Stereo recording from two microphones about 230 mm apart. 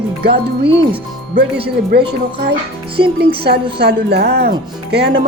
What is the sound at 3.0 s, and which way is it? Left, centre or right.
Speech, right.